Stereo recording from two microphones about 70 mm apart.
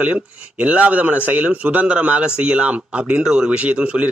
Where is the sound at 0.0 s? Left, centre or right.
Centre.